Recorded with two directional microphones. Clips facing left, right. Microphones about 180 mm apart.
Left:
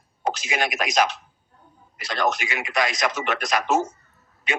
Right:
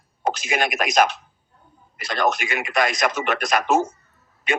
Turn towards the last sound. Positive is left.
turn(degrees=-55)  # may be behind; listen again after turning